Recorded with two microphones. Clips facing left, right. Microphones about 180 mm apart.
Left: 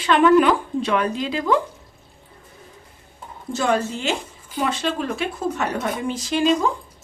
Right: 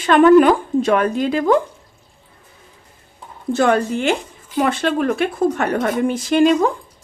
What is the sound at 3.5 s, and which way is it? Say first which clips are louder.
Speech: right 5 dB; 60° right (ahead or behind).